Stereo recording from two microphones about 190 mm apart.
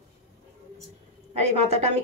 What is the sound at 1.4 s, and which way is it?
Speech, 35° right (ahead or behind).